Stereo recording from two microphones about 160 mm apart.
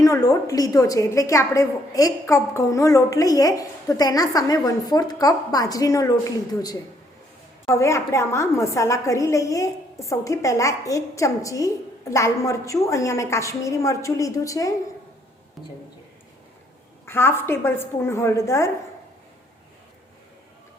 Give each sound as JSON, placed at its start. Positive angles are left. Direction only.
{"t": 0.0, "sound": "a woman's voice", "side_deg": 20}
{"t": 17.1, "sound": "a woman's voice", "side_deg": 15}